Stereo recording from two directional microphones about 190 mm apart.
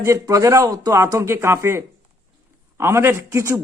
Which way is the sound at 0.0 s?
15° right (ahead or behind).